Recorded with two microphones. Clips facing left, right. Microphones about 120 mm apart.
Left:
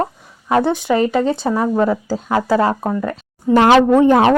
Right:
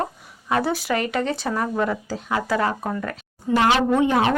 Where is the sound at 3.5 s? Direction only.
65° left (ahead or behind).